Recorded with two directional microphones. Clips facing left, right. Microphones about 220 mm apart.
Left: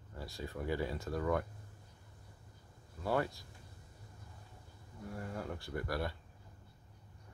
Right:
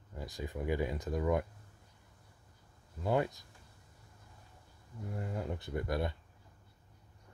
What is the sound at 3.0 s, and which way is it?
Speech, 20° right (ahead or behind).